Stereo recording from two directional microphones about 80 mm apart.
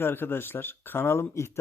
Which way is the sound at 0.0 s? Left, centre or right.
Left.